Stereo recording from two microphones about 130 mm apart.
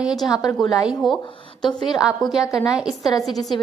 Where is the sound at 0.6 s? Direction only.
30° left (ahead or behind).